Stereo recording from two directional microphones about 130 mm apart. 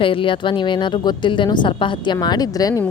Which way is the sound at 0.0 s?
40° left (ahead or behind).